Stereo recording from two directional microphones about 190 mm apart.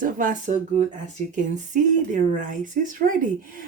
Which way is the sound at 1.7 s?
40° right (ahead or behind).